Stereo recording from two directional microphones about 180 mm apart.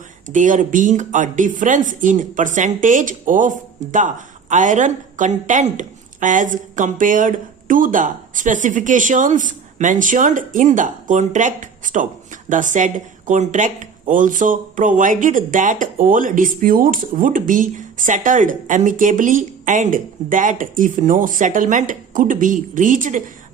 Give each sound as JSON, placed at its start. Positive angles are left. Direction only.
{"t": 0.3, "sound": "speech", "side_deg": -45}